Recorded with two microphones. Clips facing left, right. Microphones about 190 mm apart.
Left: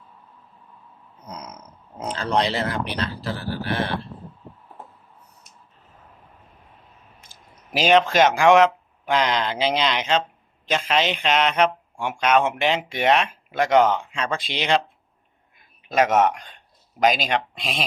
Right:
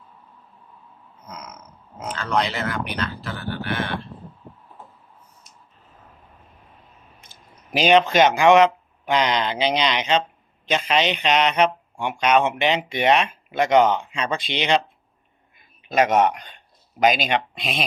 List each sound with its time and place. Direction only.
1.2 s a sound: 35° left (ahead or behind)
2.0 s speech: 30° left (ahead or behind)
7.7 s speech: centre (ahead or behind)
15.9 s speech: centre (ahead or behind)